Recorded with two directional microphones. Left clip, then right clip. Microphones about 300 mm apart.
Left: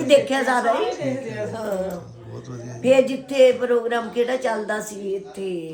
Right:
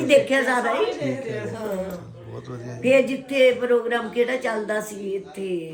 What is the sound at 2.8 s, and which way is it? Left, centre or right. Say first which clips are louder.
A woman's voice: left 2 dB; centre.